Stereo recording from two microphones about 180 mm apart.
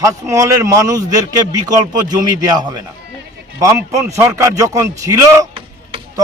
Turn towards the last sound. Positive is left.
turn(degrees=-15)  # may be behind; listen again after turning